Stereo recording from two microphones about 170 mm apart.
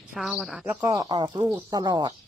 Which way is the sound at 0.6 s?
15° right (ahead or behind).